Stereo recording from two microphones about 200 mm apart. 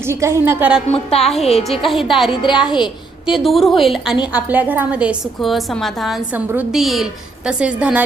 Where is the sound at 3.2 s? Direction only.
Centre (ahead or behind).